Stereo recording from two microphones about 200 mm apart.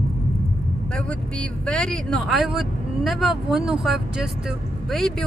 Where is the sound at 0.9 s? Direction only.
5° left (ahead or behind).